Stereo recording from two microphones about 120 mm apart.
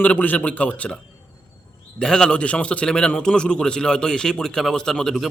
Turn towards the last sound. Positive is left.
turn(degrees=0)  # may be behind; listen again after turning